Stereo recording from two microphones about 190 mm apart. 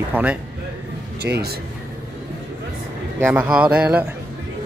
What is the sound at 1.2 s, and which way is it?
Speech, 55° right (ahead or behind).